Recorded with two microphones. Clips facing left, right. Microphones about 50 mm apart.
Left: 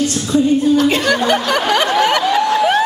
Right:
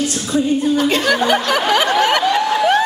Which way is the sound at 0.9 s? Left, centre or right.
Centre.